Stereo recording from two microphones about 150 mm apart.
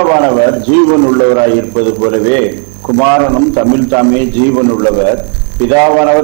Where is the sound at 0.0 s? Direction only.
20° right (ahead or behind).